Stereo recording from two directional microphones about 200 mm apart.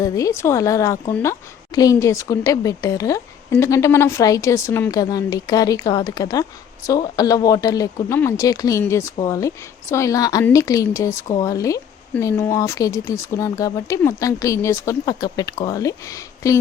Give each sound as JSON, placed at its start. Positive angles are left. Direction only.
{"t": 0.0, "sound": "speech", "side_deg": 15}